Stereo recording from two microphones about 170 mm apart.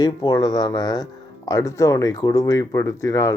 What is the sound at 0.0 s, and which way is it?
Speech, 25° left (ahead or behind).